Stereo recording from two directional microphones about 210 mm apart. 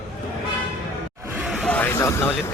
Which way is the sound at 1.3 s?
5° right (ahead or behind).